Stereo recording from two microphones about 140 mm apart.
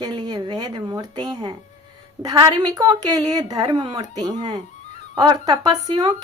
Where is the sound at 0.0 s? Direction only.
30° right (ahead or behind).